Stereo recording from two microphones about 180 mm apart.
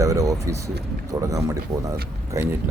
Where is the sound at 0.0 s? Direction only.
20° right (ahead or behind).